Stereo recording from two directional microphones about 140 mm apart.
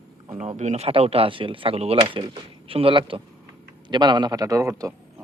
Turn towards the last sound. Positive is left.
turn(degrees=-25)  # may be behind; listen again after turning